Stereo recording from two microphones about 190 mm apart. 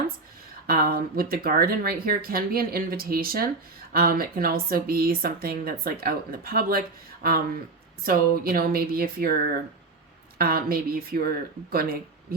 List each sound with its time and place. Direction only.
0.7 s speech: 50° right (ahead or behind)
10.3 s speech: 50° right (ahead or behind)